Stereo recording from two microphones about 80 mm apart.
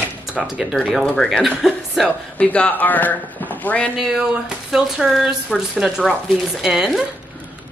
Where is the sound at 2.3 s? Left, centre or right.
Centre.